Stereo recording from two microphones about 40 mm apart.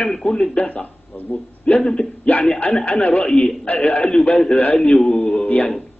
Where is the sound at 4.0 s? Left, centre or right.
Left.